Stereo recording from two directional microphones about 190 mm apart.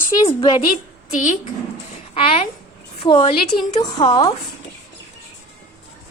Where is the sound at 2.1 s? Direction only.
30° left (ahead or behind).